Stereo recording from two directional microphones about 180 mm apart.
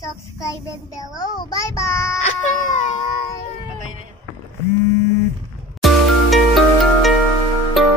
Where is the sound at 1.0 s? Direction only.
20° left (ahead or behind).